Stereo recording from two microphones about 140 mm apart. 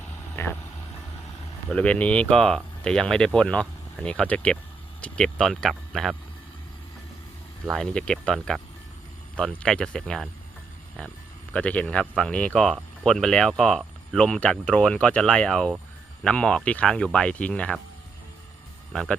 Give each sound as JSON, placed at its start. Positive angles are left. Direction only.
{"t": 0.4, "sound": "speech", "side_deg": 15}
{"t": 1.7, "sound": "speech", "side_deg": 10}
{"t": 7.7, "sound": "speech", "side_deg": 5}
{"t": 11.5, "sound": "speech", "side_deg": 10}